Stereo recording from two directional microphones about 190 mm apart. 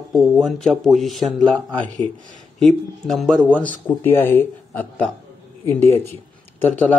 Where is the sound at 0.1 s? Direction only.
Centre (ahead or behind).